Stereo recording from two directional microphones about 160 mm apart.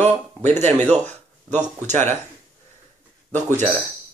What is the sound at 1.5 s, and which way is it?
Speech, 45° right (ahead or behind).